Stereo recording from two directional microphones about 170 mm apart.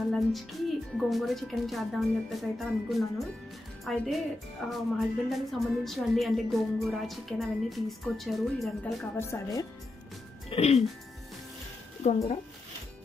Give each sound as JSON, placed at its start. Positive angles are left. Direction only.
{"t": 0.1, "sound": "a woman's voice", "side_deg": 0}
{"t": 9.1, "sound": "speech", "side_deg": 15}
{"t": 10.5, "sound": "speech", "side_deg": 40}